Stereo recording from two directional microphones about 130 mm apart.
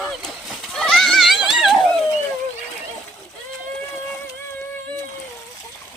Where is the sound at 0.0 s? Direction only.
Centre (ahead or behind).